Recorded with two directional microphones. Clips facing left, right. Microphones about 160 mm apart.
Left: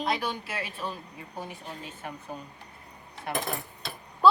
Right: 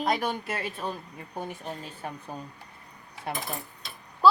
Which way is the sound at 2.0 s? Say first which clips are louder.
Right 2 dB; 30° right (ahead or behind).